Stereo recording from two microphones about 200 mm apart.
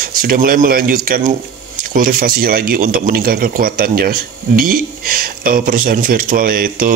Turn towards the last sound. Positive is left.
turn(degrees=-45)  # may be behind; listen again after turning